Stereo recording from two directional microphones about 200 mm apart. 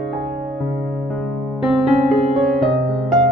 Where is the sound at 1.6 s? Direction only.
Centre (ahead or behind).